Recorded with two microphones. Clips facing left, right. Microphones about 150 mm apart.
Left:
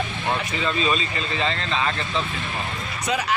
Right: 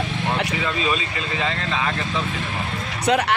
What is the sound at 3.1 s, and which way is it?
Speech, 65° right (ahead or behind).